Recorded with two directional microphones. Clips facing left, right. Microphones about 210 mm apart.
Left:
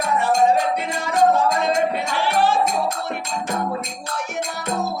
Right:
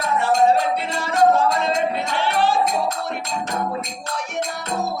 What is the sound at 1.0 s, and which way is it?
Music, 15° left (ahead or behind).